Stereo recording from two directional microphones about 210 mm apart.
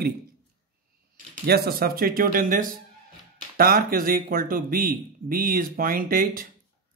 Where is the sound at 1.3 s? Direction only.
50° right (ahead or behind).